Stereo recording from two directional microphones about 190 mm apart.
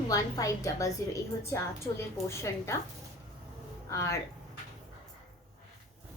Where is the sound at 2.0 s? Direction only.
15° left (ahead or behind).